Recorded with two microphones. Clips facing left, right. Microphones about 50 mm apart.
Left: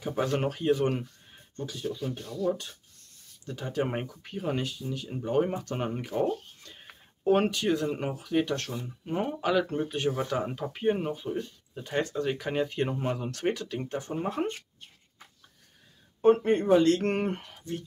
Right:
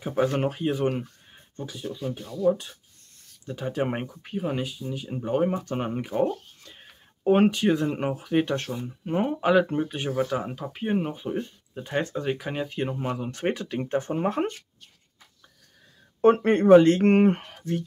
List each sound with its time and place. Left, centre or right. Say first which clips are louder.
0.0 s speech: right 4 dB; centre
7.2 s speech: right 4 dB; centre
11.1 s speech: right 2 dB; right
12.2 s speech: even; centre
13.3 s speech: right 2 dB; right
14.5 s a sound: left 4 dB; left
16.4 s speech: right 7 dB; right
16.8 s speech: right 6 dB; right
17.6 s a sound: right 7 dB; right